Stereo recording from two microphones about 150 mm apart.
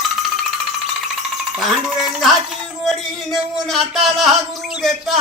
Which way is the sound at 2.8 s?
Centre (ahead or behind).